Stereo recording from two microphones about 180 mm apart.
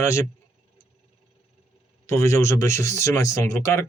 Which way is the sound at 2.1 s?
15° left (ahead or behind).